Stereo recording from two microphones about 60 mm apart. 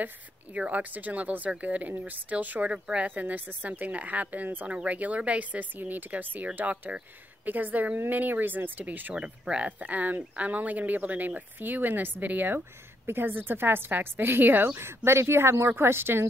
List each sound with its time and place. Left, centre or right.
0.6 s speech: right
9.1 s speech: centre
15.0 s speech: right